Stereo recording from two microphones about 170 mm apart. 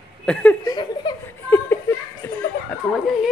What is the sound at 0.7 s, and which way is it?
Chuckle, 25° left (ahead or behind).